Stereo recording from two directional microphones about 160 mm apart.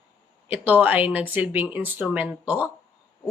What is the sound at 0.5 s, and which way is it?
Speech, 10° right (ahead or behind).